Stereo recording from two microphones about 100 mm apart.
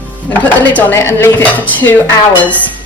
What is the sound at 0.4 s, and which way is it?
Speech, 15° left (ahead or behind).